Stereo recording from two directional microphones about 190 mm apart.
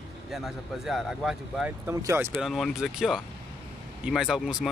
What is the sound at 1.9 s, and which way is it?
Speech, 15° right (ahead or behind).